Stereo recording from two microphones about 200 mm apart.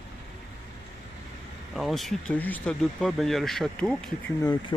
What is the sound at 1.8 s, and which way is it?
Speech, centre (ahead or behind).